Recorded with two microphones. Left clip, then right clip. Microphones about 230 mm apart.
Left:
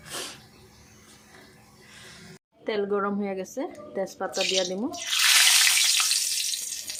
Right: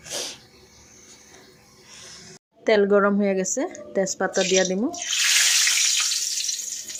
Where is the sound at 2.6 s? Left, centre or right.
Right.